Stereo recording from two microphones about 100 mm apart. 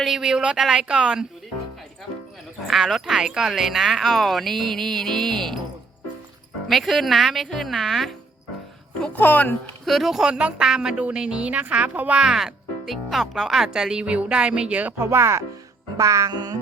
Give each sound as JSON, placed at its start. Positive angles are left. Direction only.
{"t": 0.0, "sound": "speech", "side_deg": -5}
{"t": 2.6, "sound": "speech", "side_deg": 0}
{"t": 6.7, "sound": "speech", "side_deg": 0}
{"t": 9.0, "sound": "a woman's voice", "side_deg": 20}
{"t": 9.8, "sound": "speech", "side_deg": 0}
{"t": 16.0, "sound": "music", "side_deg": -35}